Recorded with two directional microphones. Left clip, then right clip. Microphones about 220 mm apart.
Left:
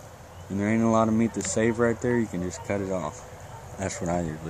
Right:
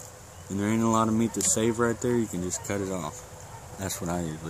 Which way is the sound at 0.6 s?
5° right (ahead or behind).